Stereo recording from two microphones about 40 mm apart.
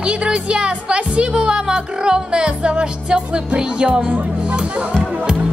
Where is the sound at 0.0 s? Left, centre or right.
Right.